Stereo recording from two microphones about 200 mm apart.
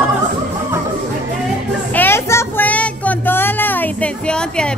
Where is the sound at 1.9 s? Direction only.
10° left (ahead or behind).